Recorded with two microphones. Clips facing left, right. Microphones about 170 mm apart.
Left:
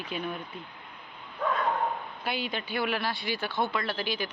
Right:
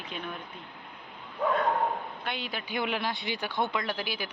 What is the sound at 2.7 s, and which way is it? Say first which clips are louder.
Speech: even; 20° right (ahead or behind).